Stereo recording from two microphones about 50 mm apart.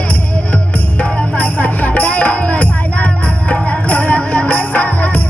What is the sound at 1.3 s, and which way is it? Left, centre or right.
Music, left.